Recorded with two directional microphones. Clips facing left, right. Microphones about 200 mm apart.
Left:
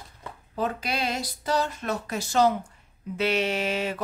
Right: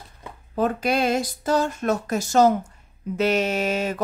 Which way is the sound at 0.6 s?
50° right (ahead or behind).